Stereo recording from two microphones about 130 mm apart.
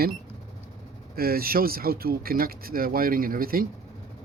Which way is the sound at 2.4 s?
90° right.